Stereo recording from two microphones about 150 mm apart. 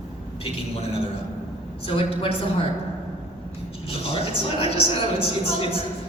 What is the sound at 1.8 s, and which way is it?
Speech, 40° left (ahead or behind).